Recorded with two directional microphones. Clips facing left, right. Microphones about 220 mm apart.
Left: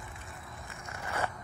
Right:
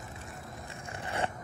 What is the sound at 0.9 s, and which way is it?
Biting, 30° right (ahead or behind).